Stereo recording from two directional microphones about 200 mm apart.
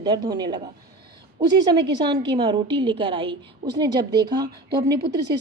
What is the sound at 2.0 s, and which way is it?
A woman's voice, 20° right (ahead or behind).